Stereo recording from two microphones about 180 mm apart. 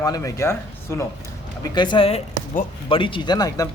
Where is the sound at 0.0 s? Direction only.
20° left (ahead or behind).